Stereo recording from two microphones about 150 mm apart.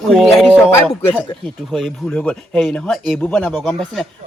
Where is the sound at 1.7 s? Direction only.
5° left (ahead or behind).